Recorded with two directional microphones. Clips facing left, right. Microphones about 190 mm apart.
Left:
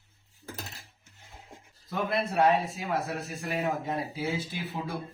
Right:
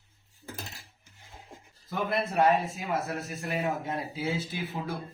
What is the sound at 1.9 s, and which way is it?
Speech, centre (ahead or behind).